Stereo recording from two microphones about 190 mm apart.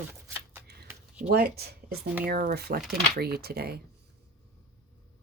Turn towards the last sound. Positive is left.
turn(degrees=-55)  # may be behind; listen again after turning